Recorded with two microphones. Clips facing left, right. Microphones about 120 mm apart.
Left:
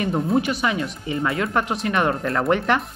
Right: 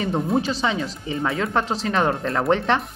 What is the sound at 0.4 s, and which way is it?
Speech, 30° right (ahead or behind).